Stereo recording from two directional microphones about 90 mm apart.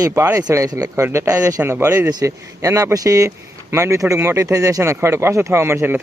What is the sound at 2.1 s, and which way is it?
Speech, 40° right (ahead or behind).